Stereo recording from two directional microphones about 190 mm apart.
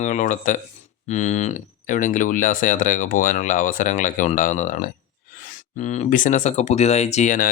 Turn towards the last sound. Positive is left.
turn(degrees=45)  # may be behind; listen again after turning